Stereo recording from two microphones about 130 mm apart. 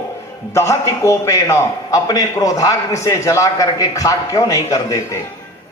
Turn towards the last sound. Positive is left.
turn(degrees=25)  # may be behind; listen again after turning